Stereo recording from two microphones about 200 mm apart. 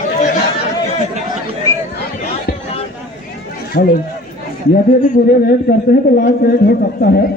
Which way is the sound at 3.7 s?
45° left (ahead or behind).